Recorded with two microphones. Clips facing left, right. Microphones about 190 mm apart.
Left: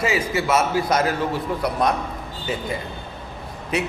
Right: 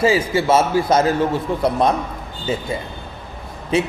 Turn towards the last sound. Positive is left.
turn(degrees=-30)  # may be behind; listen again after turning